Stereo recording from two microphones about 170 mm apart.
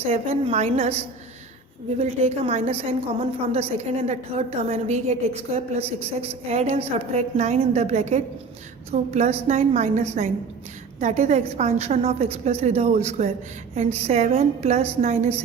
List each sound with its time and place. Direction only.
0.0 s a woman's voice: 35° right (ahead or behind)
2.0 s a woman's voice: 40° right (ahead or behind)